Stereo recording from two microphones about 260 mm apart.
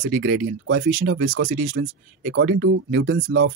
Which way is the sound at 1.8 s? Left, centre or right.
Right.